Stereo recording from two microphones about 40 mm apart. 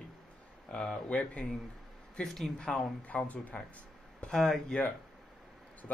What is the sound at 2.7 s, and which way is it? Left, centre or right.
Speech, centre.